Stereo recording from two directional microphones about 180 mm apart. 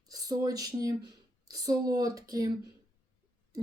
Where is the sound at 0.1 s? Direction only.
20° right (ahead or behind).